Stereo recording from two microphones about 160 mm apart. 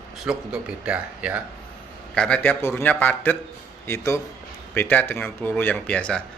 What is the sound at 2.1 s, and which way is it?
Speech, 5° left (ahead or behind).